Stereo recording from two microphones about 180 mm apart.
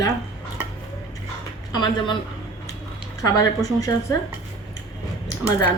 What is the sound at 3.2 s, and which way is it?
Speech, 20° left (ahead or behind).